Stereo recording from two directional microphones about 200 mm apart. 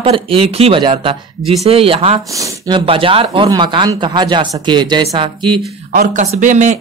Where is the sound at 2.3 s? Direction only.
15° right (ahead or behind).